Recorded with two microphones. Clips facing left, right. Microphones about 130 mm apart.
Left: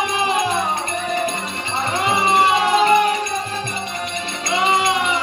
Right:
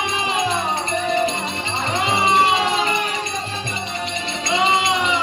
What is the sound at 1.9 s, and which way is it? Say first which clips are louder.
Music: even; 45° left (ahead or behind).